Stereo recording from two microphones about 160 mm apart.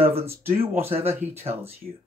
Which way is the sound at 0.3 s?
15° right (ahead or behind).